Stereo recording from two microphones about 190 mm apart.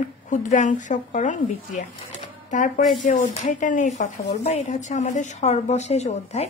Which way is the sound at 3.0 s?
40° left (ahead or behind).